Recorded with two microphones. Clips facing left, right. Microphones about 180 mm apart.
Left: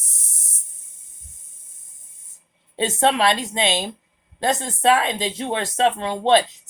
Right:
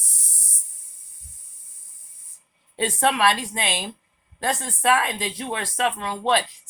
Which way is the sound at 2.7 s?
25° left (ahead or behind).